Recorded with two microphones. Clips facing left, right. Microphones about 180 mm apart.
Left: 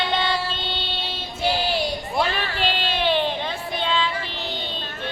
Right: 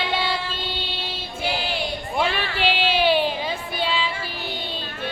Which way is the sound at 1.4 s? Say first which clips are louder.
Left 4 dB; 40° left (ahead or behind).